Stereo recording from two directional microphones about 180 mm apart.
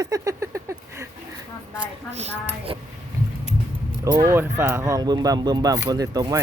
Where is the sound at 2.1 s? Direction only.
35° right (ahead or behind).